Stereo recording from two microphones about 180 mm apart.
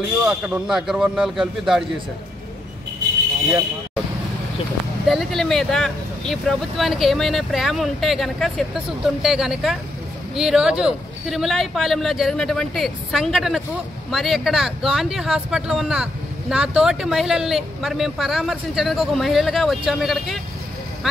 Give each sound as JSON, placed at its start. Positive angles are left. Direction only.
{"t": 0.3, "sound": "speech", "side_deg": -5}
{"t": 5.0, "sound": "speech", "side_deg": 0}